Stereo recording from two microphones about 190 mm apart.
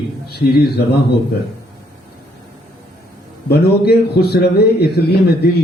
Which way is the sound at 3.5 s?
55° left (ahead or behind).